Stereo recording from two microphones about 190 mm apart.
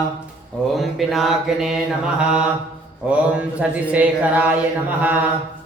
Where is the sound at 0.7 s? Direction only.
Centre (ahead or behind).